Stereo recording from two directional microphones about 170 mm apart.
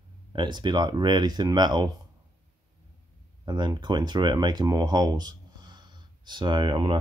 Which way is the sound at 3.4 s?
25° right (ahead or behind).